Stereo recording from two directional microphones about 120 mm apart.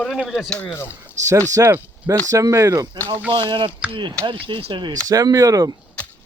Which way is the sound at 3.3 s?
45° right (ahead or behind).